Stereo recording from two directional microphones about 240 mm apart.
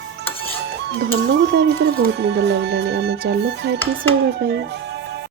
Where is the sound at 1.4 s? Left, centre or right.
Right.